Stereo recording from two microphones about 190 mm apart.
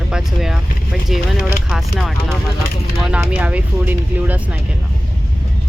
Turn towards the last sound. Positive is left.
turn(degrees=-5)  # may be behind; listen again after turning